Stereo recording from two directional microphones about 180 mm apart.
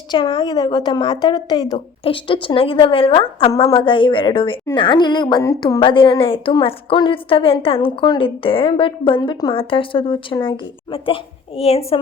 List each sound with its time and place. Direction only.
0.1 s a woman's voice: 25° left (ahead or behind)